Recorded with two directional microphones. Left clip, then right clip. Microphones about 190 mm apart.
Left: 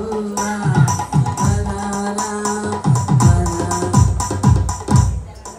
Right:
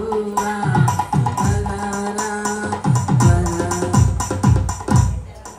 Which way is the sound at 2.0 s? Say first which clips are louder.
Left 2 dB; 15° right (ahead or behind).